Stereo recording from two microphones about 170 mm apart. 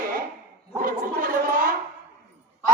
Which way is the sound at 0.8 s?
55° right (ahead or behind).